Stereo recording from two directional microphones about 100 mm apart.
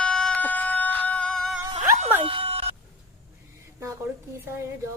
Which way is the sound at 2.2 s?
65° right (ahead or behind).